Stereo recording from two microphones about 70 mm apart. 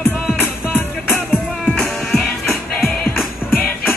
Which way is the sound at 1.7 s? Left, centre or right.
Centre.